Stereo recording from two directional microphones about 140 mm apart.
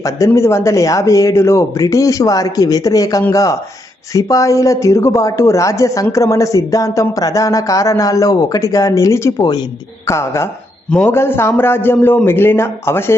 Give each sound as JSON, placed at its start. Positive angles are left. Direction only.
{"t": 0.3, "sound": "a man's voice", "side_deg": 20}